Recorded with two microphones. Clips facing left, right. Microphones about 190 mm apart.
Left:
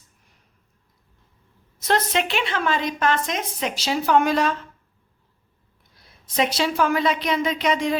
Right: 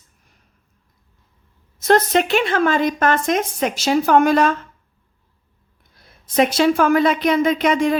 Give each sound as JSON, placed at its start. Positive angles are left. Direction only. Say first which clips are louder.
{"t": 1.8, "sound": "a woman's voice", "louder": "right 7 dB", "side_deg": -45}
{"t": 6.0, "sound": "a woman's voice", "louder": "right 6 dB", "side_deg": -55}